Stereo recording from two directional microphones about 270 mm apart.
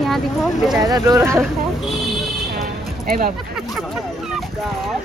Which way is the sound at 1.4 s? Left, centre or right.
Centre.